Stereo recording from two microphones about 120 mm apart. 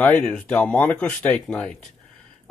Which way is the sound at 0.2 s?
5° left (ahead or behind).